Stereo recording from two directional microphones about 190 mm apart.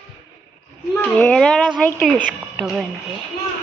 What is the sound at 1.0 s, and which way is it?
Speech, 5° left (ahead or behind).